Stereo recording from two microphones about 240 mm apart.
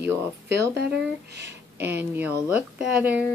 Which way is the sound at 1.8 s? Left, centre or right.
Centre.